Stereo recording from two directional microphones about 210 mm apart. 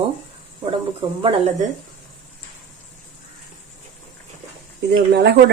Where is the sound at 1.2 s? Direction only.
25° right (ahead or behind).